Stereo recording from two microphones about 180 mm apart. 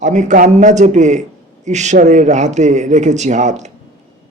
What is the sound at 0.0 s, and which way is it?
Speech, 40° right (ahead or behind).